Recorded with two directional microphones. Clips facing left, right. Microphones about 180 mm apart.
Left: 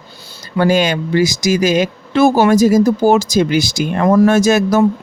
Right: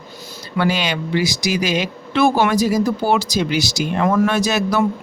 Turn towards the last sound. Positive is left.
turn(degrees=45)  # may be behind; listen again after turning